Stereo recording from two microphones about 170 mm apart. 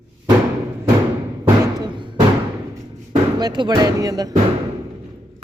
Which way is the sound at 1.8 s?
25° right (ahead or behind).